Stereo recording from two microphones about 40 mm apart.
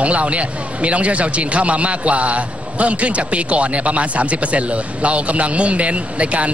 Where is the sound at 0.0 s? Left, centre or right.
Right.